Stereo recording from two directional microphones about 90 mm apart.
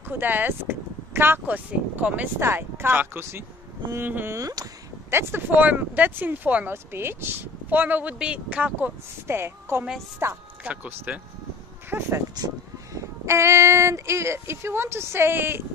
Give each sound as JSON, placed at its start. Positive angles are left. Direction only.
{"t": 0.2, "sound": "speech", "side_deg": -20}
{"t": 4.4, "sound": "speech", "side_deg": -40}
{"t": 5.1, "sound": "speech", "side_deg": -25}
{"t": 10.6, "sound": "speech", "side_deg": -15}
{"t": 12.4, "sound": "a sound", "side_deg": -50}
{"t": 13.2, "sound": "speech", "side_deg": -30}